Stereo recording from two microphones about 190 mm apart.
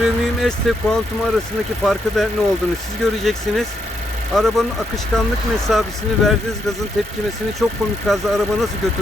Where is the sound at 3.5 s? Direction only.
Centre (ahead or behind).